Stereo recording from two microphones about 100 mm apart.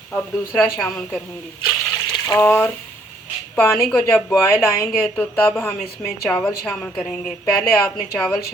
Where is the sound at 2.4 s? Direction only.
20° left (ahead or behind).